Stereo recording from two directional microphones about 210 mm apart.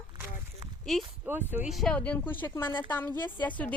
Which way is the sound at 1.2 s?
10° right (ahead or behind).